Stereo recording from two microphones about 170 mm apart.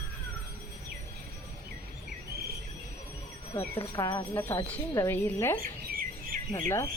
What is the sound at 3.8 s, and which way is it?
Speech, 25° left (ahead or behind).